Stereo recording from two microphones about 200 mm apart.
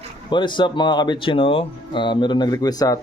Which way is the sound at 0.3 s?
25° left (ahead or behind).